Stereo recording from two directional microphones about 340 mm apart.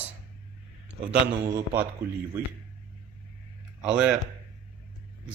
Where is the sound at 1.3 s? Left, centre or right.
Centre.